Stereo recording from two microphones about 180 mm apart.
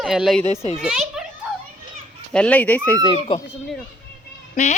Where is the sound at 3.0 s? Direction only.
25° left (ahead or behind).